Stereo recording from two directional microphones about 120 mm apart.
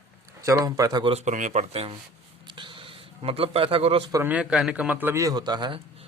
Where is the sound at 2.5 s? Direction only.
40° right (ahead or behind).